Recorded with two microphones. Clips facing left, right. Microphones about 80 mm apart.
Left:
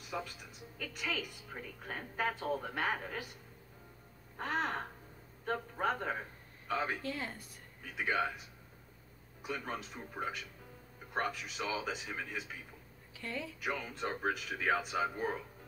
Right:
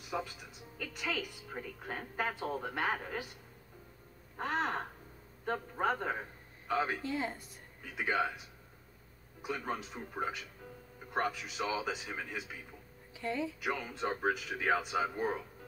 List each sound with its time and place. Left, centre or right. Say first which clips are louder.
0.1 s speech: right 3 dB; centre
4.4 s a man's voice: right 2 dB; centre
7.0 s speech: right 4 dB; centre
7.8 s speech: right 1 dB; centre
9.4 s speech: right 2 dB; centre
13.1 s a woman's voice: right 6 dB; centre
13.6 s speech: right 2 dB; centre